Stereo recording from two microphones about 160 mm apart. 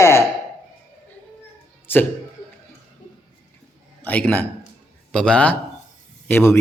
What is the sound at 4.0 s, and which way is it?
A man's voice, 10° left (ahead or behind).